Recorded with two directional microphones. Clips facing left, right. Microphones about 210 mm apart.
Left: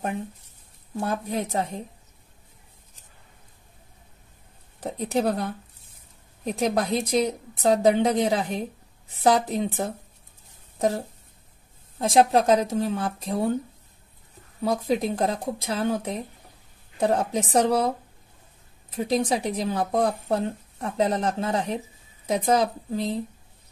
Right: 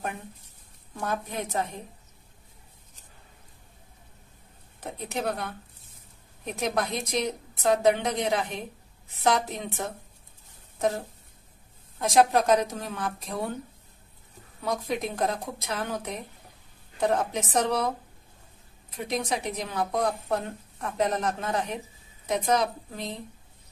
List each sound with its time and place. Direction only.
0.9 s speech: 30° left (ahead or behind)
4.9 s speech: 30° left (ahead or behind)
12.0 s speech: 30° left (ahead or behind)
14.6 s speech: 30° left (ahead or behind)
18.9 s speech: 30° left (ahead or behind)